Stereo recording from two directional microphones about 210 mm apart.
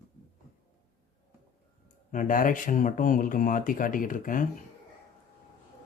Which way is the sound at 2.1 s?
40° left (ahead or behind).